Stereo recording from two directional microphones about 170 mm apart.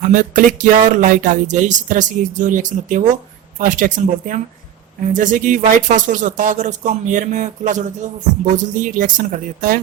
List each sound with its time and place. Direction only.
0.0 s speech: 50° right (ahead or behind)